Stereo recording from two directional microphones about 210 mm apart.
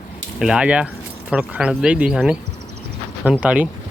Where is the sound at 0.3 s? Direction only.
5° right (ahead or behind).